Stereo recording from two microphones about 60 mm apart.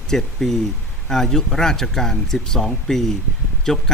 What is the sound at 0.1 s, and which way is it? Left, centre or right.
Speech, centre.